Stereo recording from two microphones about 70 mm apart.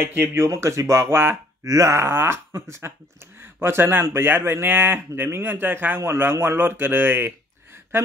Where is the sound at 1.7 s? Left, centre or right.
Right.